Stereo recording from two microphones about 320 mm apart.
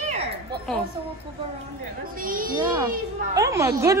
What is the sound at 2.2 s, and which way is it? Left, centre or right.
Speech, right.